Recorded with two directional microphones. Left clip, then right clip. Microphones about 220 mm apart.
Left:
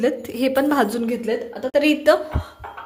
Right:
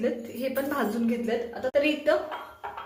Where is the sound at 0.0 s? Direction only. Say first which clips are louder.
Left 8 dB; 50° left (ahead or behind).